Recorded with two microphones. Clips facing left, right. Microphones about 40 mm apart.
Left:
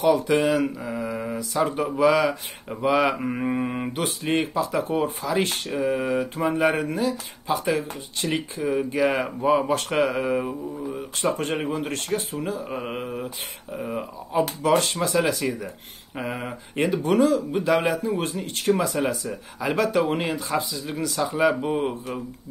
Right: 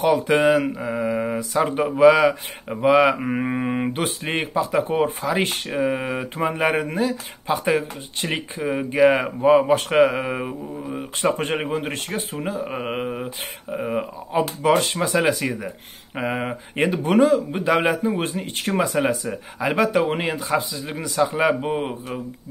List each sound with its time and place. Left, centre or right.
0.0 s speech: right
2.2 s speech: centre